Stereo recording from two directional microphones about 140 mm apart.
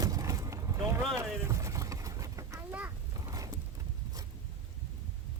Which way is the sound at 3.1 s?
25° right (ahead or behind).